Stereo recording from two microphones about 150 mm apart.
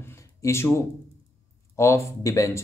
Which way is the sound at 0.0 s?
20° left (ahead or behind).